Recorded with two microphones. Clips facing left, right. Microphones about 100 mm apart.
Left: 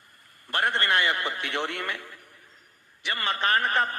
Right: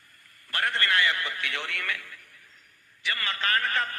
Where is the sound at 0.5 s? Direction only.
20° left (ahead or behind).